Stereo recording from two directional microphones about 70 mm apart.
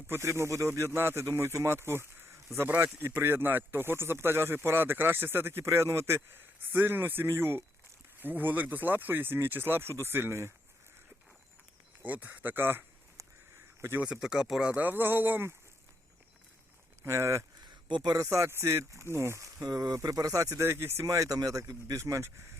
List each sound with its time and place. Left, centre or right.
0.1 s speech: right
2.6 s speech: right
12.0 s speech: right
14.0 s speech: centre
14.7 s speech: right
17.0 s speech: right
17.7 s a sound: right
18.2 s speech: right
19.6 s speech: right
20.6 s speech: right
21.0 s speech: right